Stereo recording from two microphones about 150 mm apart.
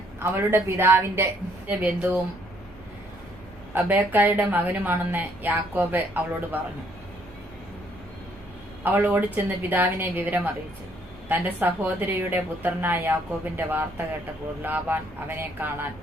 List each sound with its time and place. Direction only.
0.2 s a woman's voice: 15° right (ahead or behind)
3.8 s a woman's voice: 15° right (ahead or behind)
8.8 s a woman's voice: 10° right (ahead or behind)